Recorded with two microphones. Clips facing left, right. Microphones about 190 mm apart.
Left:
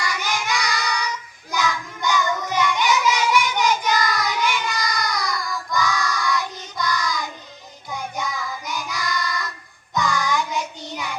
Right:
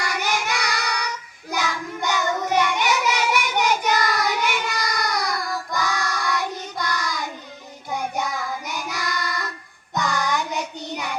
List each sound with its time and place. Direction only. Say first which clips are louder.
0.0 s child singing: right 1 dB; 60° right (ahead or behind)